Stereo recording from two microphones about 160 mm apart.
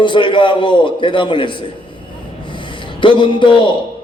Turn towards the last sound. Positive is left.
turn(degrees=30)  # may be behind; listen again after turning